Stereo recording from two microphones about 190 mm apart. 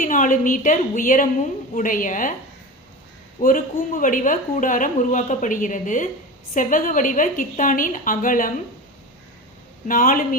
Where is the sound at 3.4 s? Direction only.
45° left (ahead or behind).